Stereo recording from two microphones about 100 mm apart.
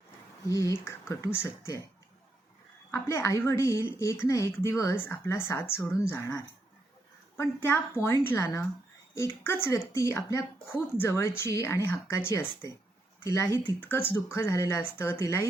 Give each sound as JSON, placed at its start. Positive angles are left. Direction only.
{"t": 0.4, "sound": "speech", "side_deg": 30}
{"t": 2.9, "sound": "speech", "side_deg": 30}
{"t": 7.3, "sound": "speech", "side_deg": 25}